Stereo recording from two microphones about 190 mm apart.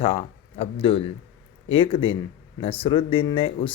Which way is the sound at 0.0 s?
30° left (ahead or behind).